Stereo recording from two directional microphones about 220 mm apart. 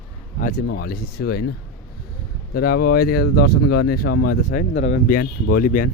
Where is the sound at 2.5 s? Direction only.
45° left (ahead or behind).